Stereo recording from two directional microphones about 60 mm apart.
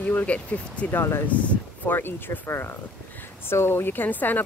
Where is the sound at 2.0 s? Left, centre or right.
Left.